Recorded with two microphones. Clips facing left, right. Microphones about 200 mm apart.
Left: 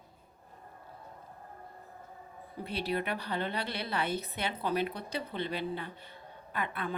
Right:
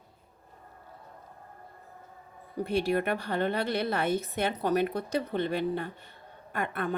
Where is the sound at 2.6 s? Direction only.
50° right (ahead or behind).